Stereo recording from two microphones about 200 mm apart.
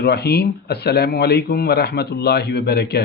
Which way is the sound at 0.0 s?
55° left (ahead or behind).